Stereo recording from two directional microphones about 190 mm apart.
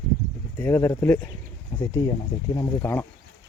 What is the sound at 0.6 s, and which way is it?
Speech, 10° left (ahead or behind).